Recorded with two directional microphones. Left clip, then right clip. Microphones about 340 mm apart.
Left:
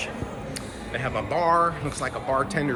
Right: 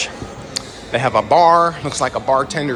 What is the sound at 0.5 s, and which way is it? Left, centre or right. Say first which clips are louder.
A man's voice: right 15 dB; centre.